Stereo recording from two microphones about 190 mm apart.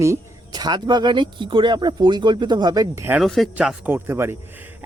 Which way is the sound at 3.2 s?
Centre (ahead or behind).